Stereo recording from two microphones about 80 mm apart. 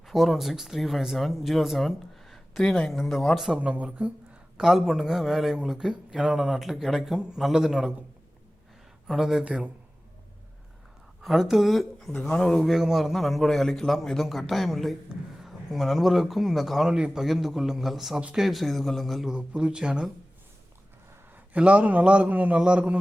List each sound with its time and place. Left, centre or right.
0.0 s speech: centre
3.6 s a man's voice: centre
4.5 s speech: centre
9.0 s a man's voice: centre
11.2 s speech: centre
12.6 s speech: centre
19.3 s a man's voice: centre
21.3 s a man's voice: centre